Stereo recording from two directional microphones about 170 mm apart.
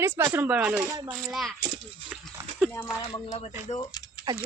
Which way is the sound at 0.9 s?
20° right (ahead or behind).